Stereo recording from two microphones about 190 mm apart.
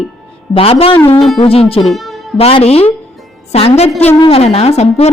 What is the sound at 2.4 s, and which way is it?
Speech, 30° left (ahead or behind).